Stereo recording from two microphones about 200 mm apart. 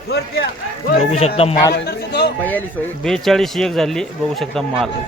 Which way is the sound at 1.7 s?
55° left (ahead or behind).